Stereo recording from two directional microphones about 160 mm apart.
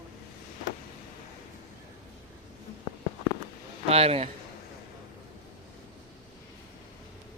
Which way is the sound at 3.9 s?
40° right (ahead or behind).